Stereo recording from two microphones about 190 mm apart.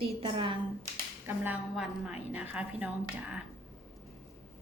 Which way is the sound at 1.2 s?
10° right (ahead or behind).